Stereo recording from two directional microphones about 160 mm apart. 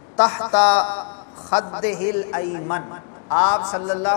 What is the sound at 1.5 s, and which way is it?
Speech, 25° left (ahead or behind).